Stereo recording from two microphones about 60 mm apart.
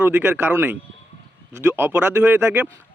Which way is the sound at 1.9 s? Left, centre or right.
Right.